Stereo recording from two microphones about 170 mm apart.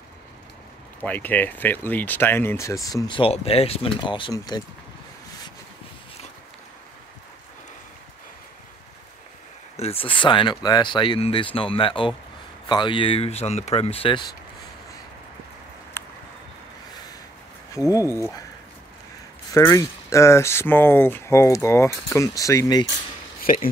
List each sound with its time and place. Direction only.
1.0 s speech: 10° left (ahead or behind)
9.8 s speech: 35° left (ahead or behind)
16.0 s a sound: 15° left (ahead or behind)
17.9 s speech: 15° left (ahead or behind)
19.5 s speech: 20° left (ahead or behind)
23.4 s a sound: 55° left (ahead or behind)